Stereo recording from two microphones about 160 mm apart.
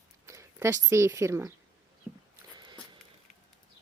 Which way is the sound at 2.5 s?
30° right (ahead or behind).